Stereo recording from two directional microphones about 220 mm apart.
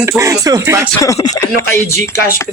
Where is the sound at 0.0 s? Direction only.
15° right (ahead or behind).